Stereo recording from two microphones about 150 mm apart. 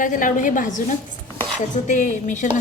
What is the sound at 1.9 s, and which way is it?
Speech, 55° left (ahead or behind).